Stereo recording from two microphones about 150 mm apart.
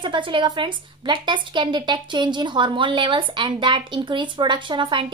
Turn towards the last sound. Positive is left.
turn(degrees=-35)  # may be behind; listen again after turning